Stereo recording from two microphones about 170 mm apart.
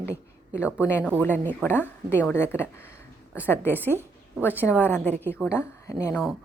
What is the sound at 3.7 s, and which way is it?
Speech, 10° right (ahead or behind).